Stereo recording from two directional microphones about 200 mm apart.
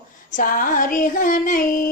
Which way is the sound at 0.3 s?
40° left (ahead or behind).